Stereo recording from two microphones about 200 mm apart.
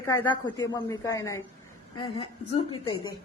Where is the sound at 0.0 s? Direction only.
15° left (ahead or behind).